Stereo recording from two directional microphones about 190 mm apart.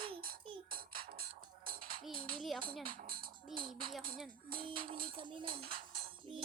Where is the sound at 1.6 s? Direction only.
50° right (ahead or behind).